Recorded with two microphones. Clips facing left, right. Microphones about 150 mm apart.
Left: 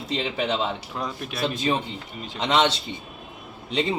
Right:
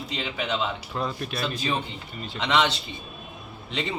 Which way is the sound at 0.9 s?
10° left (ahead or behind).